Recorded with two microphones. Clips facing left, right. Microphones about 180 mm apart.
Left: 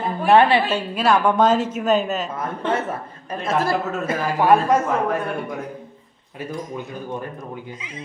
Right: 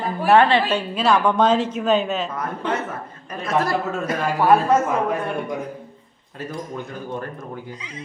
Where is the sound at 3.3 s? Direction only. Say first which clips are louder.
Even; 25° left (ahead or behind).